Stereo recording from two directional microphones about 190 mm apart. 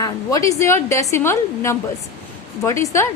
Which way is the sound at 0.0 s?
15° left (ahead or behind).